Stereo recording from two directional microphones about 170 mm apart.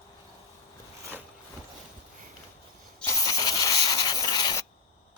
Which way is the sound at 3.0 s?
20° left (ahead or behind).